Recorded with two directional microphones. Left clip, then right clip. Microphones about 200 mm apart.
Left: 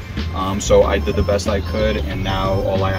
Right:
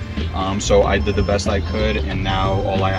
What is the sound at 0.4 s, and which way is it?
Speech, 20° left (ahead or behind).